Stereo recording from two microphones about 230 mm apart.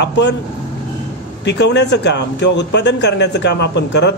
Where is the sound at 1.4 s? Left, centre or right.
Left.